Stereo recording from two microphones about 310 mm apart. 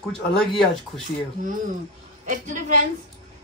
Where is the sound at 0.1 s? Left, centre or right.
Centre.